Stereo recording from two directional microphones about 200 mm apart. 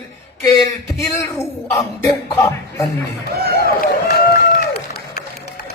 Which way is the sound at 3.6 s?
50° left (ahead or behind).